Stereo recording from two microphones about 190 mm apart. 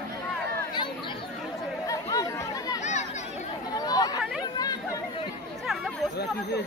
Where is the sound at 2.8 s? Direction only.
35° left (ahead or behind).